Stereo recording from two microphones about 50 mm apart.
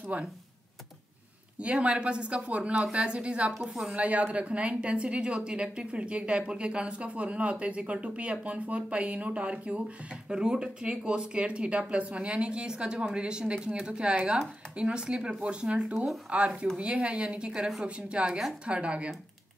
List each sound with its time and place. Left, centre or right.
0.1 s speech: right
1.6 s a woman's voice: right
3.5 s a woman's voice: centre
3.9 s a woman's voice: right